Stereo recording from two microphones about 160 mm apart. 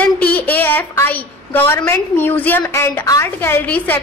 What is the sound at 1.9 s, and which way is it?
A woman's voice, 10° left (ahead or behind).